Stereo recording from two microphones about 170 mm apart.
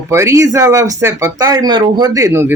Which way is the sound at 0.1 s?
15° right (ahead or behind).